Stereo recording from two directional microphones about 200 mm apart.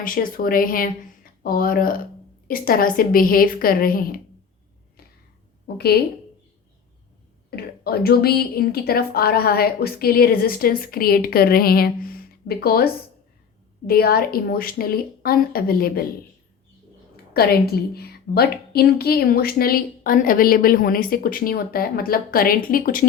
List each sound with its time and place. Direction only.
0.0 s a woman's voice: 45° left (ahead or behind)
5.6 s a woman's voice: 50° left (ahead or behind)
7.5 s a woman's voice: 50° left (ahead or behind)
17.3 s a woman's voice: 50° left (ahead or behind)